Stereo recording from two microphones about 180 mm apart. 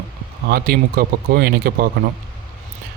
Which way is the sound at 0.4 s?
55° right (ahead or behind).